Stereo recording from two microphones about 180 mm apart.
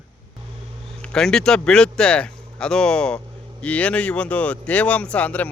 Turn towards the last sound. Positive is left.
turn(degrees=5)  # may be behind; listen again after turning